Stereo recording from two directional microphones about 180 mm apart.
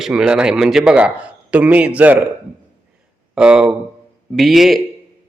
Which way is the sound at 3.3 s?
5° right (ahead or behind).